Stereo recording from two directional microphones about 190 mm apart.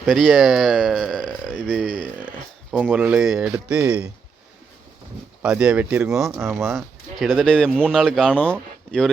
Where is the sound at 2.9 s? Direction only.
5° right (ahead or behind).